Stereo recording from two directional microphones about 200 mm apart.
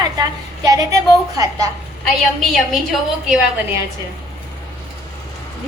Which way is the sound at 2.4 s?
Centre (ahead or behind).